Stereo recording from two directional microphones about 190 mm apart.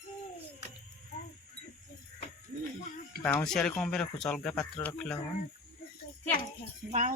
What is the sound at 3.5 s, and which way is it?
Speech, 5° left (ahead or behind).